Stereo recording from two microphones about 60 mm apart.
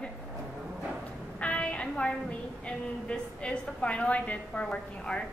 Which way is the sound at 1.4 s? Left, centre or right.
Centre.